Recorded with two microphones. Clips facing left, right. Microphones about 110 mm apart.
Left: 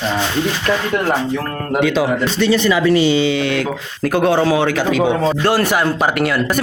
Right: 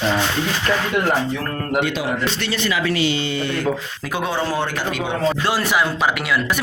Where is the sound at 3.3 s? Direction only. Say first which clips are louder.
Left 6 dB; 85° left.